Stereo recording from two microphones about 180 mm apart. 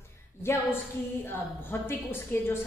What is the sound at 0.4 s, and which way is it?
A woman's voice, 15° left (ahead or behind).